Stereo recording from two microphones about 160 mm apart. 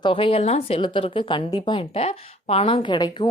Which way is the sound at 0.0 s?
35° left (ahead or behind).